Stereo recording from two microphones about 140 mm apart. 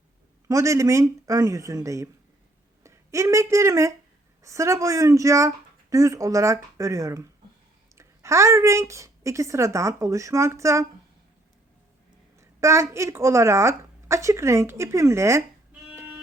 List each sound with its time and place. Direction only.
0.4 s a woman's voice: 20° right (ahead or behind)
12.4 s a woman's voice: 20° right (ahead or behind)
16.0 s music: 10° right (ahead or behind)